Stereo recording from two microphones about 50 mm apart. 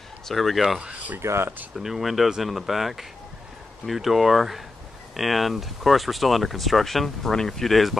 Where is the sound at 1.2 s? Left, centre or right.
Right.